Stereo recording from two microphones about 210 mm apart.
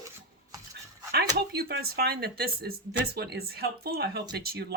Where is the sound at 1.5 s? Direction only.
50° right (ahead or behind).